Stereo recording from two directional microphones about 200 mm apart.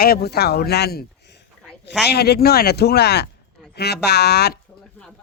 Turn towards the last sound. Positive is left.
turn(degrees=55)  # may be behind; listen again after turning